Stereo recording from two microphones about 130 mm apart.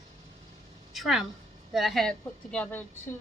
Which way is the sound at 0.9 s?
Centre (ahead or behind).